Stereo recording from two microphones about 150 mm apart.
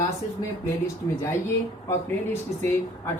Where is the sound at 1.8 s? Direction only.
15° left (ahead or behind).